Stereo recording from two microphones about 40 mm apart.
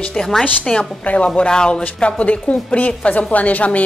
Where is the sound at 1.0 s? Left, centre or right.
Left.